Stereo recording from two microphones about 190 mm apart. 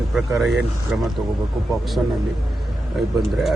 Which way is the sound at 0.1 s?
Centre (ahead or behind).